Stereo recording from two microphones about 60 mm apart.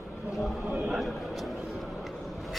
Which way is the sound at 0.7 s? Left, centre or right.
Centre.